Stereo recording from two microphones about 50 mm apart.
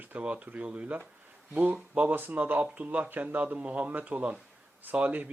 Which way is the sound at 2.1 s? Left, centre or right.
Right.